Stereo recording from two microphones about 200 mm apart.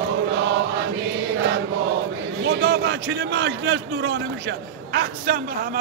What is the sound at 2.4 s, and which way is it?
A man's voice, 60° right (ahead or behind).